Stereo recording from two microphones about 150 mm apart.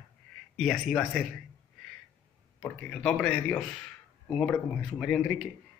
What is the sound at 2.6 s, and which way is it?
Speech, 10° left (ahead or behind).